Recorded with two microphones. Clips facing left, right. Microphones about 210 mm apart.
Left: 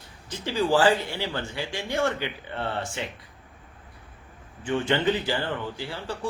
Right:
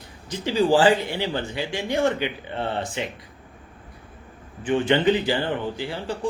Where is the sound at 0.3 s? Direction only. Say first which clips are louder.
Right 4 dB; 15° right (ahead or behind).